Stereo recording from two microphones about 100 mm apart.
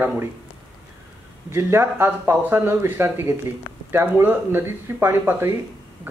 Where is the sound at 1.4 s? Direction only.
25° right (ahead or behind).